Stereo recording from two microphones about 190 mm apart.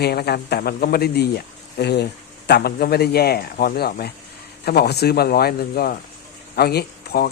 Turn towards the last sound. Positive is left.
turn(degrees=55)  # may be behind; listen again after turning